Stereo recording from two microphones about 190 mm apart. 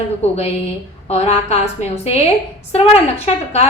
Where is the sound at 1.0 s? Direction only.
35° left (ahead or behind).